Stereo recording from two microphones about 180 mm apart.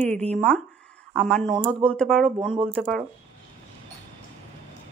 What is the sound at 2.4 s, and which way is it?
Speech, 30° right (ahead or behind).